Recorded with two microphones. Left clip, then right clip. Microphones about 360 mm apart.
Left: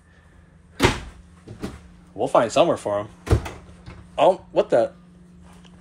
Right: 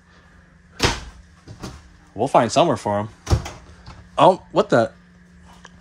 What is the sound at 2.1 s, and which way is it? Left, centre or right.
Speech, right.